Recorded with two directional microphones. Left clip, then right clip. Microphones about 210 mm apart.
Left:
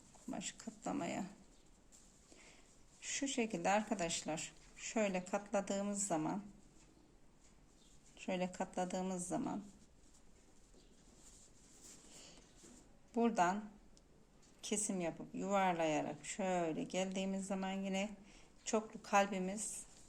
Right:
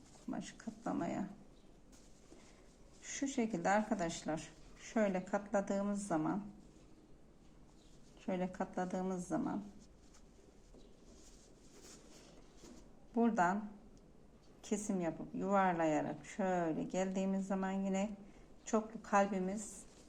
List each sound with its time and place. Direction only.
0.3 s a sound: 20° left (ahead or behind)
0.9 s speech: 25° left (ahead or behind)
3.3 s speech: 35° left (ahead or behind)
5.2 s speech: 30° left (ahead or behind)
5.7 s speech: 20° left (ahead or behind)
8.2 s speech: 20° left (ahead or behind)
13.1 s speech: 20° left (ahead or behind)
14.8 s speech: 20° left (ahead or behind)
19.3 s speech: 25° left (ahead or behind)